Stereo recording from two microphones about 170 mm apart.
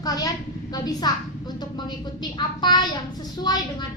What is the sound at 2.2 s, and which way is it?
Speech, 25° left (ahead or behind).